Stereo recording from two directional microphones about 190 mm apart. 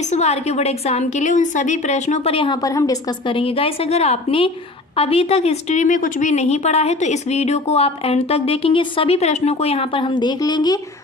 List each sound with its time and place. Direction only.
0.0 s a woman's voice: 35° left (ahead or behind); by 10.8 s 20° left (ahead or behind)